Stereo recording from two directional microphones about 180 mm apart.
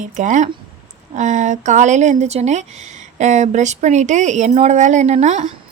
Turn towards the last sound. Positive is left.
turn(degrees=-40)  # may be behind; listen again after turning